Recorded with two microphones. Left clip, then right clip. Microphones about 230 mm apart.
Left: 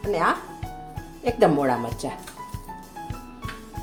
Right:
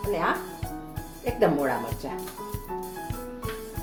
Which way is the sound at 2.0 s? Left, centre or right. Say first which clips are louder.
Left 3 dB; left.